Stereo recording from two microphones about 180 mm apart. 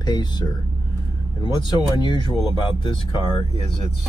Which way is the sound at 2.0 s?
25° left (ahead or behind).